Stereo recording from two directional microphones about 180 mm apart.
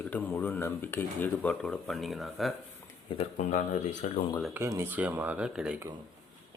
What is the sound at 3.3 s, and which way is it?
Speech, 45° left (ahead or behind).